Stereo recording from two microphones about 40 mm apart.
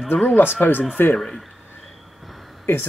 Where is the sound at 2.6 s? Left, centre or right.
Left.